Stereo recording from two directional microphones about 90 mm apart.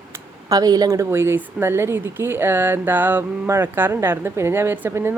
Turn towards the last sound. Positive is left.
turn(degrees=-25)  # may be behind; listen again after turning